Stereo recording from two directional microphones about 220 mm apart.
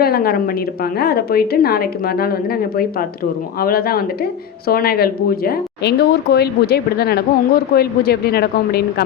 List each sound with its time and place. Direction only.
0.0 s speech: 45° left (ahead or behind)